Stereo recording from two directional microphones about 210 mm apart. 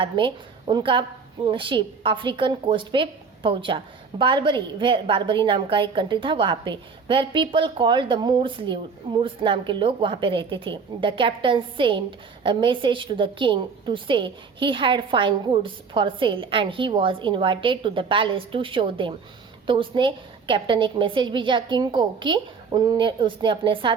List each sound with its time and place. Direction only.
0.0 s a woman's voice: 25° right (ahead or behind)